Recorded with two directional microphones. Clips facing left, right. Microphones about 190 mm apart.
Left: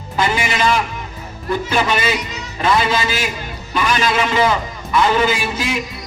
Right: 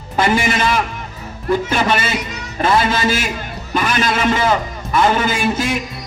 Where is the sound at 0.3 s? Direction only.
50° right (ahead or behind).